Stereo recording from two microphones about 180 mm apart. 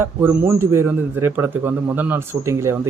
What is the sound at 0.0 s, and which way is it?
A man's voice, 15° right (ahead or behind).